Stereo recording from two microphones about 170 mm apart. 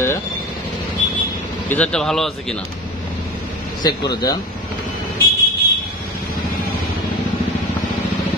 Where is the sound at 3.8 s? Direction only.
25° left (ahead or behind).